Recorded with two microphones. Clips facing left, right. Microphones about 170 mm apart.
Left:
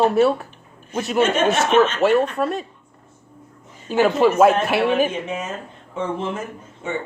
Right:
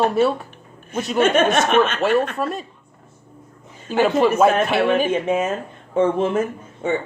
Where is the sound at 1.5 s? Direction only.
30° left (ahead or behind).